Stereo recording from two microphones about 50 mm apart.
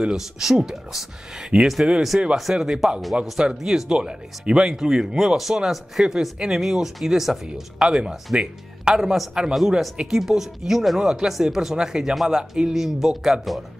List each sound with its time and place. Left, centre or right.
0.0 s speech: centre
2.5 s speech: centre
9.5 s speech: centre